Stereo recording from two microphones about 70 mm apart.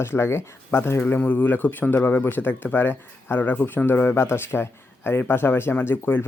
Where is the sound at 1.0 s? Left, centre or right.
Left.